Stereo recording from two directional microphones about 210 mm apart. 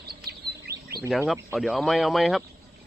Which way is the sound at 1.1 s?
Centre (ahead or behind).